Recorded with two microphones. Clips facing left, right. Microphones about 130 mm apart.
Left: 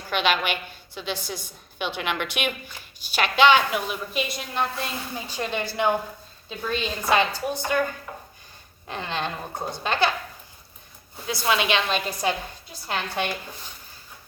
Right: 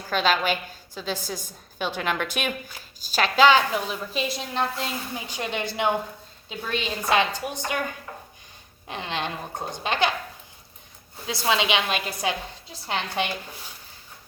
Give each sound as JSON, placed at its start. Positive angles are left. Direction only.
{"t": 0.1, "sound": "a woman's voice", "side_deg": -35}
{"t": 8.9, "sound": "a woman's voice", "side_deg": -15}
{"t": 11.4, "sound": "a woman's voice", "side_deg": -20}
{"t": 11.9, "sound": "a woman's voice", "side_deg": -5}
{"t": 12.3, "sound": "a woman's voice", "side_deg": -20}